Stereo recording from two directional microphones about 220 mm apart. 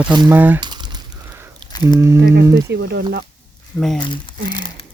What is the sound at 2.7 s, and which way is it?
Speech, 50° right (ahead or behind).